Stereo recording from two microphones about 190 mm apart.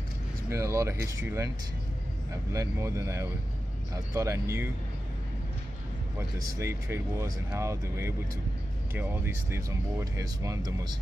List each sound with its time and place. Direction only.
0.5 s speech: 15° right (ahead or behind)
2.5 s speech: 15° right (ahead or behind)
6.1 s speech: 15° right (ahead or behind)